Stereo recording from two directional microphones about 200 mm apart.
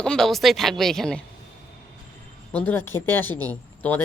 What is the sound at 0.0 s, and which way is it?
Speech, 5° left (ahead or behind).